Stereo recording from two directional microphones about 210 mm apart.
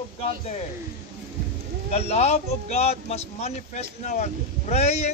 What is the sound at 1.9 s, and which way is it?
Speech, 30° left (ahead or behind).